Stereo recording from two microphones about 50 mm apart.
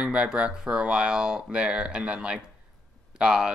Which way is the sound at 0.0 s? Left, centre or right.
Centre.